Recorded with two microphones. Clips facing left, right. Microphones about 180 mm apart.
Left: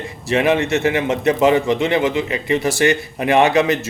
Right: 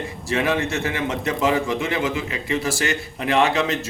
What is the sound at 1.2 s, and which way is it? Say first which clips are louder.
Speech: left 7 dB; 20° left (ahead or behind).